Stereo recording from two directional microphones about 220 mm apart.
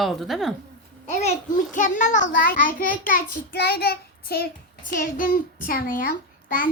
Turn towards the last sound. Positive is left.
turn(degrees=40)  # may be behind; listen again after turning